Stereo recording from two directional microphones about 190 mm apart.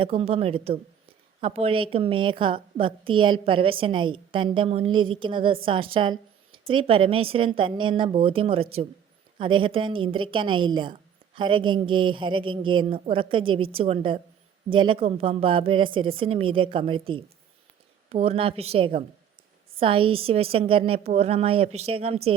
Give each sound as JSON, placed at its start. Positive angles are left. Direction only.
{"t": 0.0, "sound": "a woman's voice", "side_deg": -30}